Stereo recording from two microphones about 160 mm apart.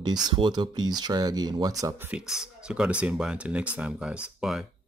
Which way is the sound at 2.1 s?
5° right (ahead or behind).